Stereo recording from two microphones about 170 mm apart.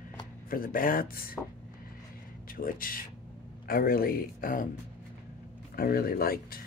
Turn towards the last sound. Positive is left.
turn(degrees=60)  # may be behind; listen again after turning